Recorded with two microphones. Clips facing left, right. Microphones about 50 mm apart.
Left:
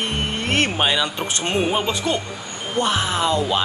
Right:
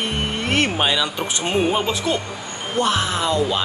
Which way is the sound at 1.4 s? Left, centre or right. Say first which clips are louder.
Right 1 dB; centre.